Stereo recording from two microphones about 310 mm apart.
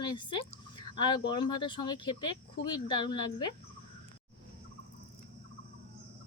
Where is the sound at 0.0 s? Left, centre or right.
Centre.